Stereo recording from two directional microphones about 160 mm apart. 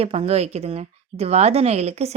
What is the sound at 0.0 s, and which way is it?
Speech, 40° right (ahead or behind).